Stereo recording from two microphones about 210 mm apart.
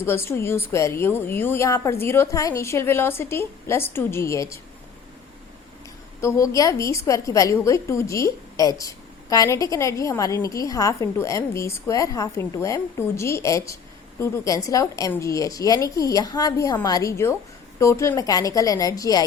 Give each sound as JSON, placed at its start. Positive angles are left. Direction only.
{"t": 0.0, "sound": "a woman's voice", "side_deg": 10}
{"t": 6.2, "sound": "a woman's voice", "side_deg": 15}